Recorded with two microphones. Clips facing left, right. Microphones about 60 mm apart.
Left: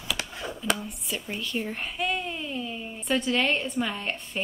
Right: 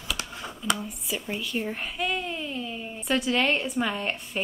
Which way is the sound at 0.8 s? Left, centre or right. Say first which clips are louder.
Right 1 dB; centre.